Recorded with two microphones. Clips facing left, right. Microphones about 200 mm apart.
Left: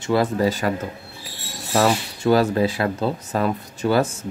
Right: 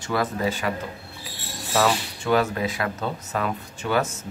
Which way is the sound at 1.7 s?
35° left (ahead or behind).